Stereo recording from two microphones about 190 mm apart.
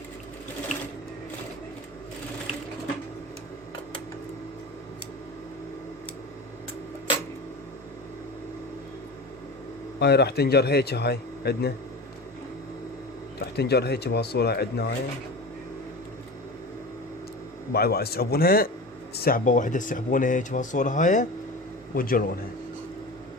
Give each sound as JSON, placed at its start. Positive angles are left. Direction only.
{"t": 10.0, "sound": "a man's voice", "side_deg": 60}
{"t": 13.4, "sound": "a man's voice", "side_deg": 60}
{"t": 17.7, "sound": "a man's voice", "side_deg": 55}